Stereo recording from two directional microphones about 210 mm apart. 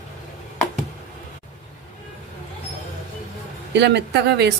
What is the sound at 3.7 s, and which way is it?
Speech, 55° right (ahead or behind).